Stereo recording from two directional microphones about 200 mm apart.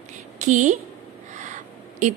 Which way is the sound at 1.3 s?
40° right (ahead or behind).